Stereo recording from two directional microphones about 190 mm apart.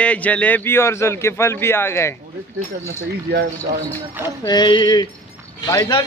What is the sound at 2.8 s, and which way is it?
Speech, 60° right (ahead or behind).